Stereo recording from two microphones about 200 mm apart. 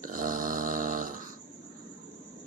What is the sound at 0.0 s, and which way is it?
Snoring, 40° right (ahead or behind).